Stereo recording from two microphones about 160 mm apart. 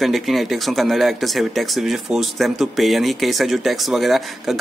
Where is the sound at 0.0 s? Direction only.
Centre (ahead or behind).